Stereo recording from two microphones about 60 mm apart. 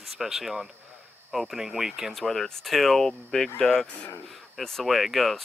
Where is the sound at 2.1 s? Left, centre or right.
Centre.